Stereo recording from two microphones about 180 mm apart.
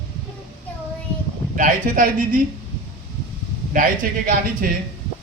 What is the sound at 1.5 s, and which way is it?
Speech, 50° right (ahead or behind).